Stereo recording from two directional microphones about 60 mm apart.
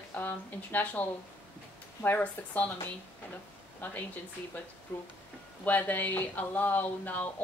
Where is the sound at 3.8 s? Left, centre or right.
Left.